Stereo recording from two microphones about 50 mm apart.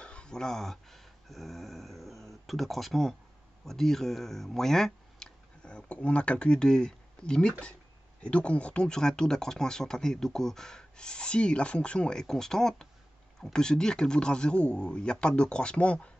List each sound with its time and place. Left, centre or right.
0.0 s speech: centre
5.6 s a sound: centre
6.0 s speech: left